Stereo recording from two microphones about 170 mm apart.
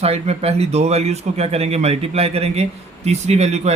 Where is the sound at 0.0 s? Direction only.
35° right (ahead or behind).